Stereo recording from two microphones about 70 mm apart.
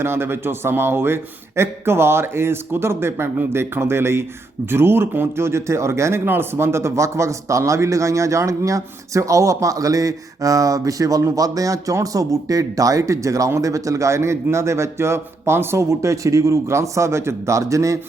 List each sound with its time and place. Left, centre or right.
0.0 s a man's voice: right